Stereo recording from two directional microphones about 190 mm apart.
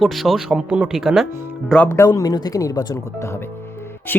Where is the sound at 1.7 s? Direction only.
10° left (ahead or behind).